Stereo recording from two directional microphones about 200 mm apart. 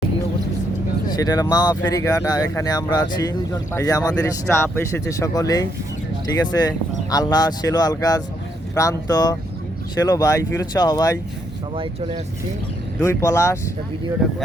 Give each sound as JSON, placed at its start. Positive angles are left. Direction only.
{"t": 1.1, "sound": "speech", "side_deg": 20}
{"t": 11.8, "sound": "speech", "side_deg": -30}
{"t": 13.0, "sound": "speech", "side_deg": 15}